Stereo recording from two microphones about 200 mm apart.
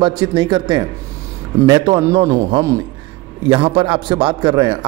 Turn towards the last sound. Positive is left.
turn(degrees=-25)  # may be behind; listen again after turning